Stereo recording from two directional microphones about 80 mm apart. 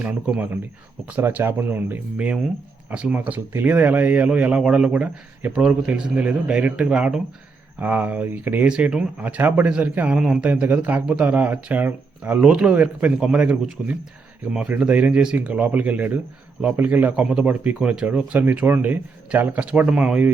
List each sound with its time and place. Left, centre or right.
0.0 s a man's voice: centre
8.6 s a man's voice: centre
9.2 s speech: right
10.2 s a man's voice: centre
10.4 s a man's voice: centre